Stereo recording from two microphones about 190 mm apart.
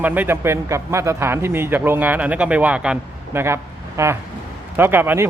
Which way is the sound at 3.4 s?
15° right (ahead or behind).